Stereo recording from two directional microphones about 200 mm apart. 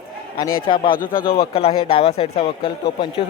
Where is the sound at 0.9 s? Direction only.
45° left (ahead or behind).